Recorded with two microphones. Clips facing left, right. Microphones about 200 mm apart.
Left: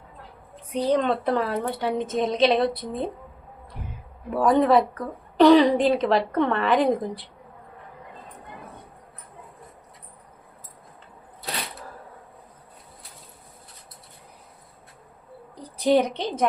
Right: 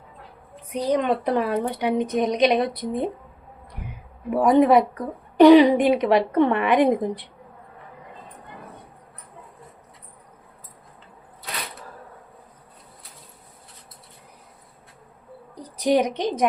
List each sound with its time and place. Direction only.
0.7 s a woman's voice: 10° right (ahead or behind)
3.8 s a sound: 10° right (ahead or behind)
4.4 s a woman's voice: 15° right (ahead or behind)
15.8 s a woman's voice: 10° right (ahead or behind)